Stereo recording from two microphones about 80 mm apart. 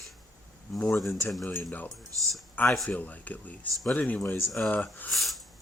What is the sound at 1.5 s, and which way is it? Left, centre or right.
Speech, left.